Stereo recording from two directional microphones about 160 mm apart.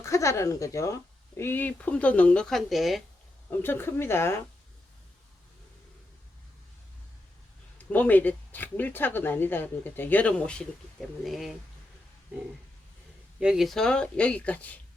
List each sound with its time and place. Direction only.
0.0 s speech: 20° left (ahead or behind); by 3.0 s centre (ahead or behind)
3.6 s speech: 15° left (ahead or behind)
7.8 s speech: 10° left (ahead or behind)
13.4 s speech: 5° right (ahead or behind)